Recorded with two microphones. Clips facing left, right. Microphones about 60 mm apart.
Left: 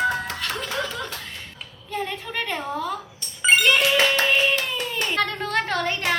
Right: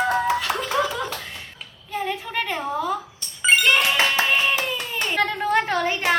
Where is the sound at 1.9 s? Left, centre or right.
Centre.